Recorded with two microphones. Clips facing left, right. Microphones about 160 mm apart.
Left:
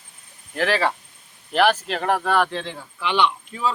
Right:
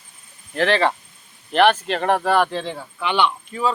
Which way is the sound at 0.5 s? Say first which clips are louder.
Right 3 dB; 5° left (ahead or behind).